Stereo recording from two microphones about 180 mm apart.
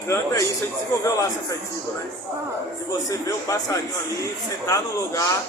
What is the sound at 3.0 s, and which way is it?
A man's voice, 20° left (ahead or behind).